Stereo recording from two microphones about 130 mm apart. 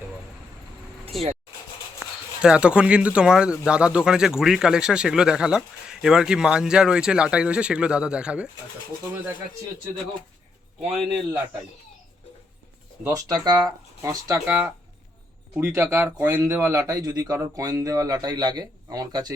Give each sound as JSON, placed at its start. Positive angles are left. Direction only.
{"t": 1.1, "sound": "a man's voice", "side_deg": 0}
{"t": 2.4, "sound": "speech", "side_deg": -10}
{"t": 10.8, "sound": "a man's voice", "side_deg": 0}
{"t": 13.1, "sound": "speech", "side_deg": -25}
{"t": 15.5, "sound": "speech", "side_deg": -15}